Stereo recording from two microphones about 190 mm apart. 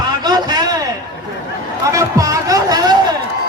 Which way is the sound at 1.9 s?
15° right (ahead or behind).